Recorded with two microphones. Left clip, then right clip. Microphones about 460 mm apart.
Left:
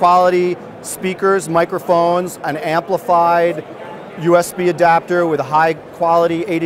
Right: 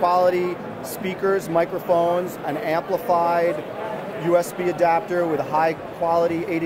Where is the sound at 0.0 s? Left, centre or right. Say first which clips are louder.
Left 7 dB; left.